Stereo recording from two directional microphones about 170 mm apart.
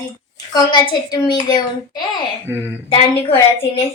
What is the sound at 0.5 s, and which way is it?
Speech, 25° left (ahead or behind).